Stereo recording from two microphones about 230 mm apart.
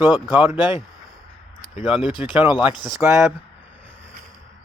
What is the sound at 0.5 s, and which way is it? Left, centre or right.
Speech, centre.